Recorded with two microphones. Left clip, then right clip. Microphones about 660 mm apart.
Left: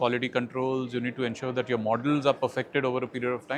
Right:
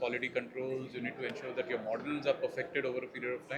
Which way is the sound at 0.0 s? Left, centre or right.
Left.